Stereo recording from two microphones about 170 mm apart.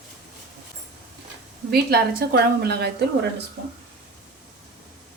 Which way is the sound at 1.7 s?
70° right (ahead or behind).